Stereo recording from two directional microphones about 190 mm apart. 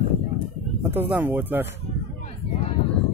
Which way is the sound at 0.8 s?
10° right (ahead or behind).